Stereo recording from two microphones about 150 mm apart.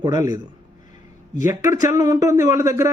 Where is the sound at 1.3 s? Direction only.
55° left (ahead or behind).